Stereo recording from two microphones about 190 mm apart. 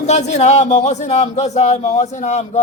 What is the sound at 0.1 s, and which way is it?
Speech, 35° left (ahead or behind).